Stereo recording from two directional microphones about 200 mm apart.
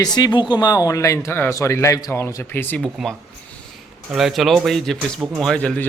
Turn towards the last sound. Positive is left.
turn(degrees=5)  # may be behind; listen again after turning